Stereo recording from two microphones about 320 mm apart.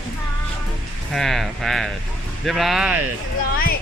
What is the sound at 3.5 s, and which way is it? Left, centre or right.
Speech, left.